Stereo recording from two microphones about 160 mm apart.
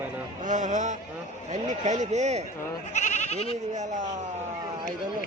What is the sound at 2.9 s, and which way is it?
Speech, 45° left (ahead or behind).